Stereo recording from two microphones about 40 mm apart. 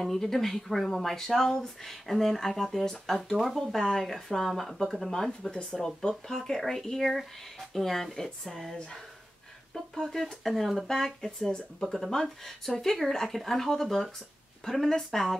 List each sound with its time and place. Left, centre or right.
0.0 s speech: centre
5.5 s speech: centre
10.1 s speech: centre
10.9 s speech: centre